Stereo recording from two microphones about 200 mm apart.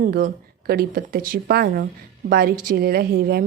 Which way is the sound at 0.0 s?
50° right (ahead or behind).